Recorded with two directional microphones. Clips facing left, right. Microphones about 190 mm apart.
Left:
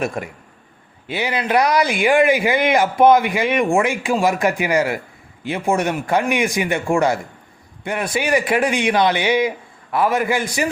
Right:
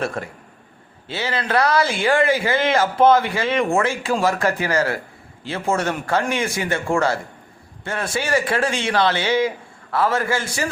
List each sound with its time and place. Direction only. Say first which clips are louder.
0.0 s a man's voice: left 2 dB; 15° left (ahead or behind)